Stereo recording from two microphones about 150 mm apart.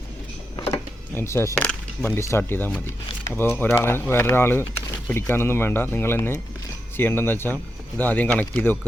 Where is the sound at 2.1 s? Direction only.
15° left (ahead or behind).